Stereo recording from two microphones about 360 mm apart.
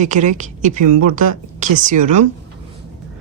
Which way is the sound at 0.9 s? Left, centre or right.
Right.